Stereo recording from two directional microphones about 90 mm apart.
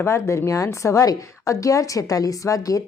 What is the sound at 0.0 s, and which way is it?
A woman's voice, 30° left (ahead or behind).